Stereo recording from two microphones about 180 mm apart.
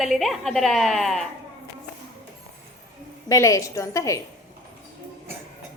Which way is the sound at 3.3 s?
15° left (ahead or behind).